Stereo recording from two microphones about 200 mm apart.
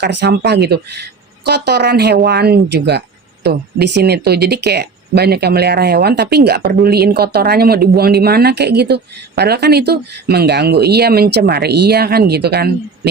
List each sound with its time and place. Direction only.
0.0 s speech: 60° right (ahead or behind)